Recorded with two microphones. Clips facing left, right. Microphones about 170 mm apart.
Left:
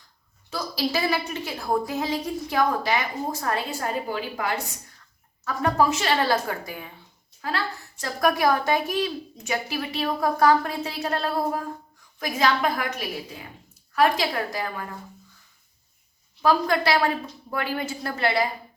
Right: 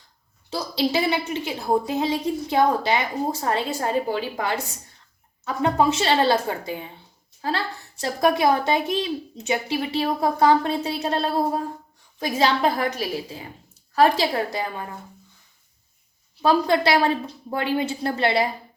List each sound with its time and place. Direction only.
0.9 s a woman's voice: 20° right (ahead or behind)
16.4 s a woman's voice: 25° right (ahead or behind)